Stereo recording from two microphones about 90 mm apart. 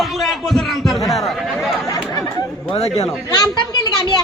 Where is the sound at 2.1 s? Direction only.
40° left (ahead or behind).